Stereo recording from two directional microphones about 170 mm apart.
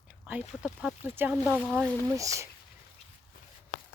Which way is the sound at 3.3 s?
55° left (ahead or behind).